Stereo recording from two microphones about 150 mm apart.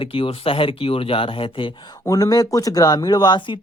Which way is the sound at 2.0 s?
25° left (ahead or behind).